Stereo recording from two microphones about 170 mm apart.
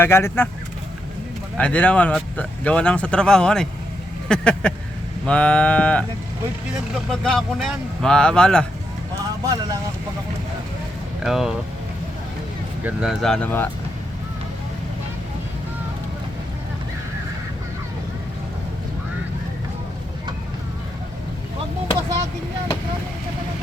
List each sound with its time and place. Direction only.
0.0 s speech: 15° left (ahead or behind)
1.5 s speech: 10° left (ahead or behind)
7.1 s speech: centre (ahead or behind)
9.4 s speech: 20° right (ahead or behind)
11.2 s speech: 5° right (ahead or behind)
12.8 s speech: 5° right (ahead or behind)